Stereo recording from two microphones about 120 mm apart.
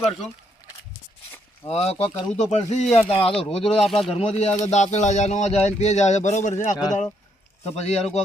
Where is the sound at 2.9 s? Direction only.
55° left (ahead or behind).